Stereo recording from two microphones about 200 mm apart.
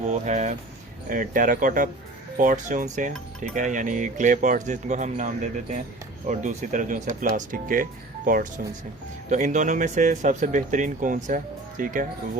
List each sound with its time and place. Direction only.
0.1 s speech: 40° right (ahead or behind)